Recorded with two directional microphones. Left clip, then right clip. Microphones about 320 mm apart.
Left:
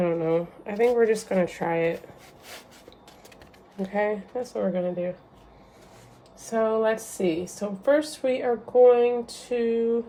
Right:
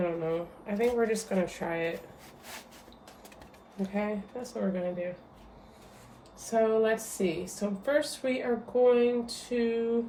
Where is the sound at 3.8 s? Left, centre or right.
Left.